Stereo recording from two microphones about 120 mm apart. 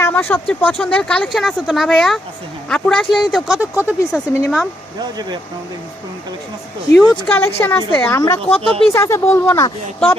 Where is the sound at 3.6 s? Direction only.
15° right (ahead or behind).